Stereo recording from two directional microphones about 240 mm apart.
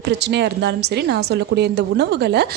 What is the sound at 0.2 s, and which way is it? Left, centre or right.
Speech, right.